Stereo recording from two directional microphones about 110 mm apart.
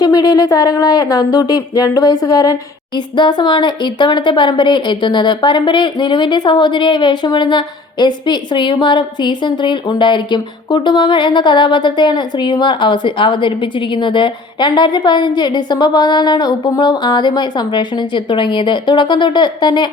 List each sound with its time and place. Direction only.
0.0 s speech: 35° left (ahead or behind)